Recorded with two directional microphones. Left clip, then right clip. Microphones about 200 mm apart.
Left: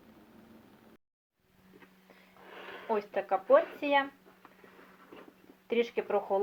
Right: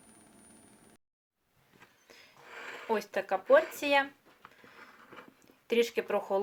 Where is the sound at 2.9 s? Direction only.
15° right (ahead or behind).